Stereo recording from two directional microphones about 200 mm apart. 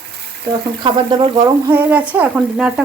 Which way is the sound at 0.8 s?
20° right (ahead or behind).